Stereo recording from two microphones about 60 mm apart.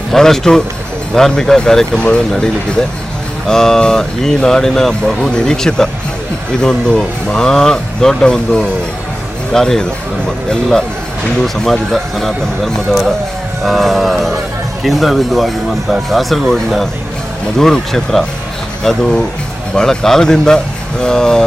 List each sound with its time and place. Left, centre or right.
0.1 s speech: centre
3.4 s speech: centre